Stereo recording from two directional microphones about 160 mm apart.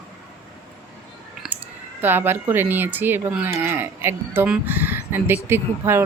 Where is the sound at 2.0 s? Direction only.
10° right (ahead or behind).